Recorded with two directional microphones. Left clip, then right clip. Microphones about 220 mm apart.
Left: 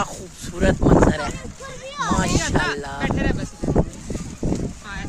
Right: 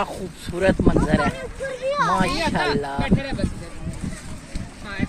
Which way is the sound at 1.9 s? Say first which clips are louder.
Right 5 dB; 50° left (ahead or behind).